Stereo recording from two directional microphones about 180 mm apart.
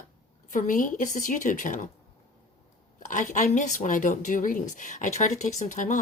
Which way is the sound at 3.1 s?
45° left (ahead or behind).